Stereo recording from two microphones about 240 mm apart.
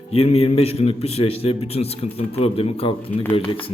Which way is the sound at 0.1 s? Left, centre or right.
Left.